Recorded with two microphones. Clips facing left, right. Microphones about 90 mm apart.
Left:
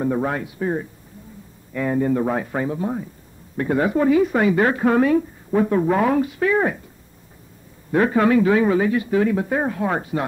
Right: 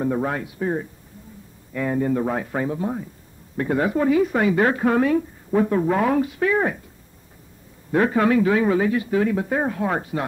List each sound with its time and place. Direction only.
0.0 s speech: 15° left (ahead or behind)
1.7 s speech: 15° left (ahead or behind)
2.5 s speech: 5° left (ahead or behind)
4.6 s speech: 5° left (ahead or behind)
4.8 s a man's voice: 20° left (ahead or behind)
6.1 s speech: 5° left (ahead or behind)
6.5 s speech: 15° left (ahead or behind)
7.9 s a man's voice: 10° left (ahead or behind)
8.6 s speech: 10° left (ahead or behind)